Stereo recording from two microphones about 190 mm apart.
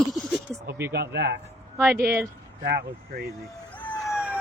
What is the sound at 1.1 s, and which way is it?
Speech, 65° right (ahead or behind).